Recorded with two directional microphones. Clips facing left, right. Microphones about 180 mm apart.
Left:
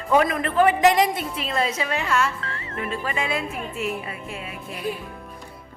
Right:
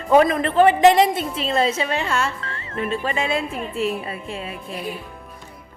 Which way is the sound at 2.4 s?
Centre (ahead or behind).